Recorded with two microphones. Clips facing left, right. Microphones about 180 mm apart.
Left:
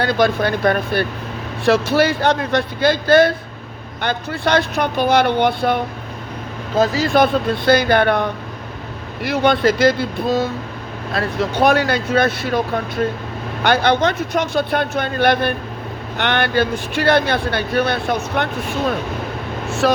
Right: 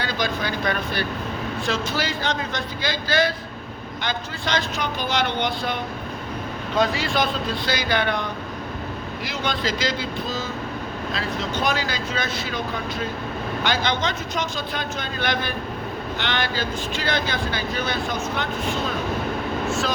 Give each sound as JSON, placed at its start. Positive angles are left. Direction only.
{"t": 0.0, "sound": "speech", "side_deg": 60}
{"t": 6.7, "sound": "speech", "side_deg": 40}
{"t": 19.8, "sound": "speech", "side_deg": 65}